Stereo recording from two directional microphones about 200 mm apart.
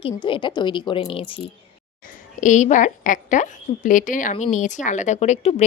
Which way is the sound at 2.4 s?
40° left (ahead or behind).